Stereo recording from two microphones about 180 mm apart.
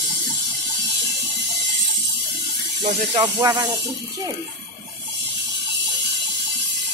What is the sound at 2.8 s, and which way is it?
Snake, 35° right (ahead or behind).